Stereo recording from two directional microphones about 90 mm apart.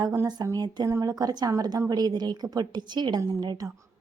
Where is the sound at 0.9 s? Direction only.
40° right (ahead or behind); by 3.2 s 55° right (ahead or behind).